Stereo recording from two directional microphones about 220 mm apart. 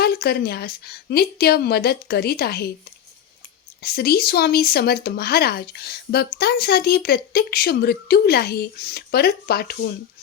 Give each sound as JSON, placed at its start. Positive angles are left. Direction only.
{"t": 0.0, "sound": "speech", "side_deg": 45}
{"t": 3.8, "sound": "speech", "side_deg": 45}